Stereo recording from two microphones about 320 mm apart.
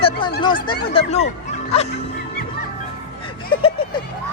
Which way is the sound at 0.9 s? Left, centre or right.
Left.